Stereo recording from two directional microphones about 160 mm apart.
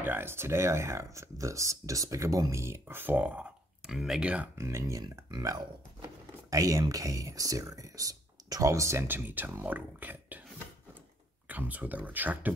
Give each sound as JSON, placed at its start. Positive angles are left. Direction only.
{"t": 0.0, "sound": "speech", "side_deg": -15}
{"t": 11.4, "sound": "speech", "side_deg": -10}